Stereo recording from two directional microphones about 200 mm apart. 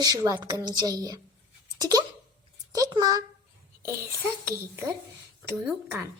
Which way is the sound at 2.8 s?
15° right (ahead or behind).